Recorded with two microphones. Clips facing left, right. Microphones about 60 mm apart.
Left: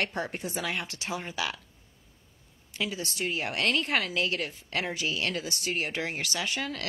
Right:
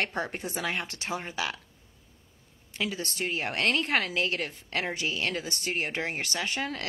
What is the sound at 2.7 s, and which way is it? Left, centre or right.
A woman's voice, right.